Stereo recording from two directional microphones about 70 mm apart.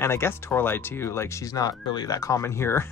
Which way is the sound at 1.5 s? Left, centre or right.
Left.